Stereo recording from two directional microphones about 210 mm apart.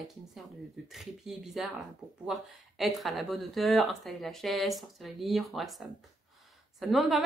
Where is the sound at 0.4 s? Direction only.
Centre (ahead or behind).